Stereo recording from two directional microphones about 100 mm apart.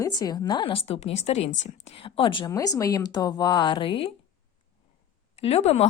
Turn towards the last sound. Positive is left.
turn(degrees=90)